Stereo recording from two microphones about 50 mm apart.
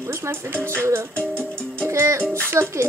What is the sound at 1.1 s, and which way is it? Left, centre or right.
Music, left.